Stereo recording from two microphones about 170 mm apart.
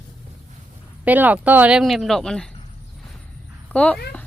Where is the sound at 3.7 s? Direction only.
10° left (ahead or behind).